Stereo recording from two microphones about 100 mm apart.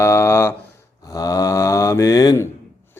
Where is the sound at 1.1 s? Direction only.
40° left (ahead or behind).